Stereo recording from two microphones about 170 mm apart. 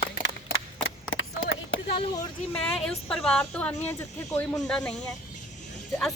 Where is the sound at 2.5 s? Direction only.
5° left (ahead or behind).